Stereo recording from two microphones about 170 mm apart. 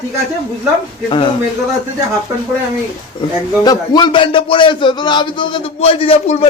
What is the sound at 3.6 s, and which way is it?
A man's voice, 25° left (ahead or behind).